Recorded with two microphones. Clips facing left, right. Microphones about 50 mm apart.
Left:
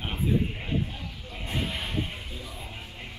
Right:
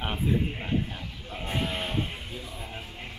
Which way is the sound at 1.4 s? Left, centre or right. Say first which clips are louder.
Right 2 dB; right.